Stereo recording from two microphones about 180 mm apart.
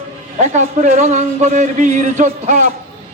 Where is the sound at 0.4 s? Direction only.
40° right (ahead or behind).